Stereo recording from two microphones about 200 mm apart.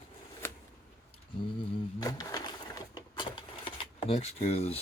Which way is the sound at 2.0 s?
20° left (ahead or behind).